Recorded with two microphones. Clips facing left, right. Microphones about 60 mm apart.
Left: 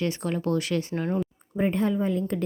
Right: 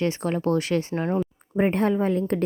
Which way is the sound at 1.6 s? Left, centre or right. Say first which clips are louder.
Right 3 dB; right.